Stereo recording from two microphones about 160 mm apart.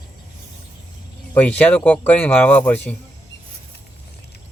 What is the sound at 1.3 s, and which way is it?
Speech, 10° left (ahead or behind).